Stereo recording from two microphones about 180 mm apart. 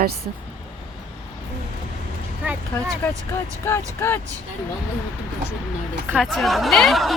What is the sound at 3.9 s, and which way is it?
Speech, 15° left (ahead or behind).